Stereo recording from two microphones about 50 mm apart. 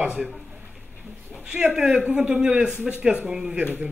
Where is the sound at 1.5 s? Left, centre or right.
Centre.